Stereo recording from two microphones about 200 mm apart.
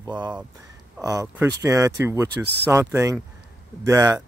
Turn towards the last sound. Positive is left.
turn(degrees=-15)  # may be behind; listen again after turning